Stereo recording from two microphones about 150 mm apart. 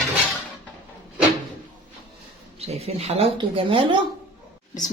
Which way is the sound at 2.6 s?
45° right (ahead or behind).